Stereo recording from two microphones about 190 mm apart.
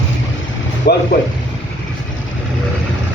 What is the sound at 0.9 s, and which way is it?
Speech, 55° left (ahead or behind).